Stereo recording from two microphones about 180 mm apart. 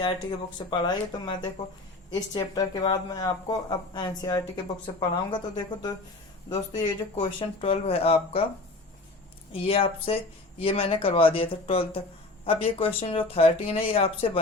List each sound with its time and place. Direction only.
0.0 s speech: 25° left (ahead or behind)
2.4 s speech: 20° left (ahead or behind)
9.5 s speech: 30° left (ahead or behind)